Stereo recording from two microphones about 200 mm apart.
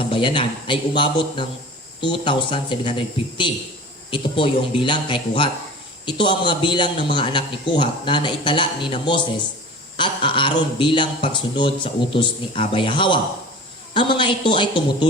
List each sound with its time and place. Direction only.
0.0 s speech: 25° left (ahead or behind)